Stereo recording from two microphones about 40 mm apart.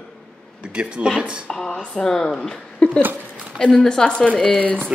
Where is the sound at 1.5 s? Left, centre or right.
Centre.